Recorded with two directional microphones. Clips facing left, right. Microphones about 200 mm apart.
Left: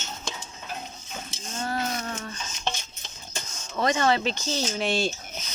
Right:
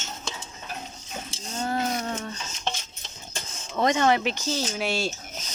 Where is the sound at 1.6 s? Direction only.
20° right (ahead or behind).